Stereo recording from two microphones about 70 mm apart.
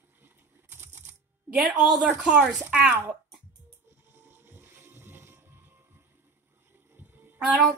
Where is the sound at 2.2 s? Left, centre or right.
Centre.